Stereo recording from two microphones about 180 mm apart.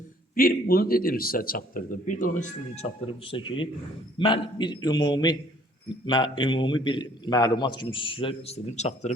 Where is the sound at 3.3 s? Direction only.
30° left (ahead or behind).